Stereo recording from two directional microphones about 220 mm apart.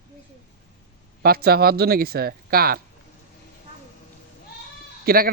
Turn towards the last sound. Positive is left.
turn(degrees=-40)  # may be behind; listen again after turning